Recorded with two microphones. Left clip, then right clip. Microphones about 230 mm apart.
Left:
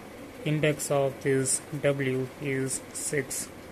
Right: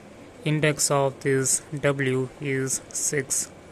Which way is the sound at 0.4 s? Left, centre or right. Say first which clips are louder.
Right 4 dB; centre.